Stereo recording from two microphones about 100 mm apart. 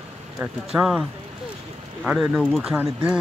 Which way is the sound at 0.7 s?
10° right (ahead or behind).